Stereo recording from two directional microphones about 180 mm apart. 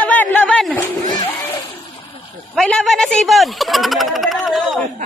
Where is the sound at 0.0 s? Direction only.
10° left (ahead or behind).